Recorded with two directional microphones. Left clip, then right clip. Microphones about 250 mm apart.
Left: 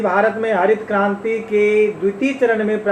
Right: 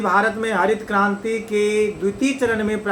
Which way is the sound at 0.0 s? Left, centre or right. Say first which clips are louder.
Left 2 dB; right.